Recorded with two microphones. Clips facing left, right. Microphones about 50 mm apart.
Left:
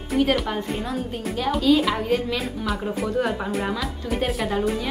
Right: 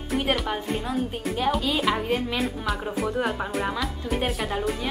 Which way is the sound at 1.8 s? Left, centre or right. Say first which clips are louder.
Left 2 dB; centre.